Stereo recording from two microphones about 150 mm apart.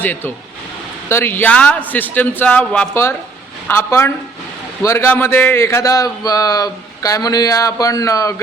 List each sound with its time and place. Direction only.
0.0 s a man's voice: 10° left (ahead or behind)